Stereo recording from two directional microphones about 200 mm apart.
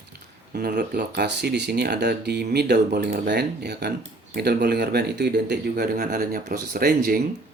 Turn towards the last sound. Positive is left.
turn(degrees=-45)  # may be behind; listen again after turning